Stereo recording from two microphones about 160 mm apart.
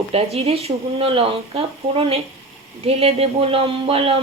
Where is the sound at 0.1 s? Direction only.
40° right (ahead or behind).